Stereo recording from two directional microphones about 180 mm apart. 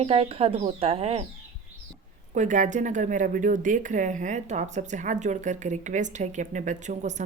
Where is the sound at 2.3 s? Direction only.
45° right (ahead or behind).